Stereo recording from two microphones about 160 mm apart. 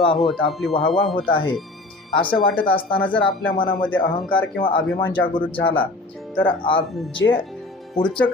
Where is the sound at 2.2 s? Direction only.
30° left (ahead or behind).